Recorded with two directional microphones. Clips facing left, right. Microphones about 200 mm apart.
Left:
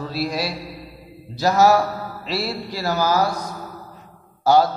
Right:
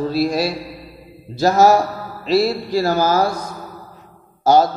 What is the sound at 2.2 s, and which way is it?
Speech, 45° right (ahead or behind).